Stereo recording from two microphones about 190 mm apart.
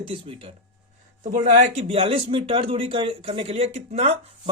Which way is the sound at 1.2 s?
40° right (ahead or behind).